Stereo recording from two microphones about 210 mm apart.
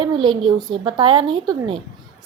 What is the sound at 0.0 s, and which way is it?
A woman's voice, 20° right (ahead or behind).